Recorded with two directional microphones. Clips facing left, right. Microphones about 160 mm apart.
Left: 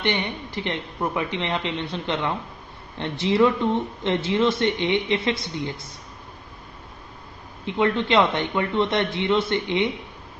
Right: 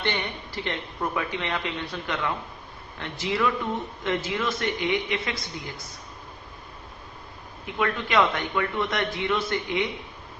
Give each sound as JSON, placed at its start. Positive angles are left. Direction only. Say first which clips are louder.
{"t": 0.0, "sound": "speech", "louder": "left 4 dB", "side_deg": 20}
{"t": 7.6, "sound": "speech", "louder": "left 6 dB", "side_deg": 25}